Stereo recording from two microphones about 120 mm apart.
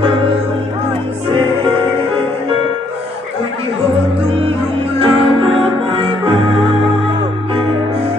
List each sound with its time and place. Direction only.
4.9 s music: 50° right (ahead or behind)